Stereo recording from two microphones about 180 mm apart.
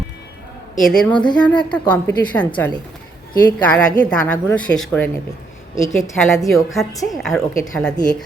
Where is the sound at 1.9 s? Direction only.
10° left (ahead or behind).